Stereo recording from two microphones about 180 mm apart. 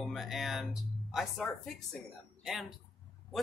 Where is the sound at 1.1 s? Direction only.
Centre (ahead or behind).